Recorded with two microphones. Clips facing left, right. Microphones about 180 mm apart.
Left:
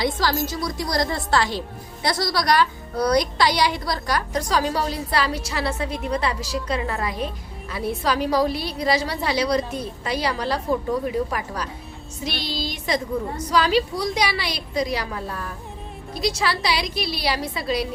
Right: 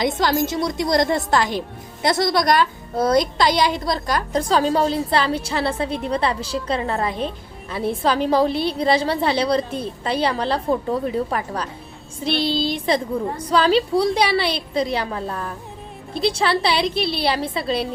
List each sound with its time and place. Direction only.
0.2 s a woman's voice: 25° right (ahead or behind)